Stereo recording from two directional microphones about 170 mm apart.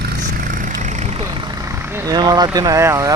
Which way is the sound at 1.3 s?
25° right (ahead or behind).